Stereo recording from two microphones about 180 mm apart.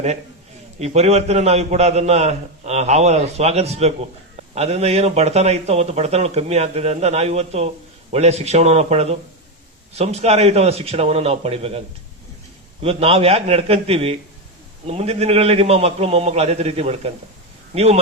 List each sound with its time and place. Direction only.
0.8 s a man's voice: 35° right (ahead or behind)
12.8 s a man's voice: 35° right (ahead or behind)